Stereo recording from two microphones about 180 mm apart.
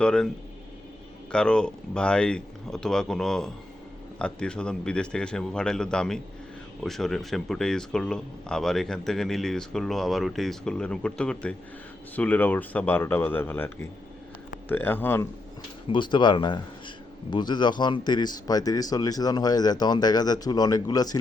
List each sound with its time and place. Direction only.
0.0 s speech: 5° left (ahead or behind)
1.3 s speech: 5° left (ahead or behind)
15.9 s speech: 25° left (ahead or behind)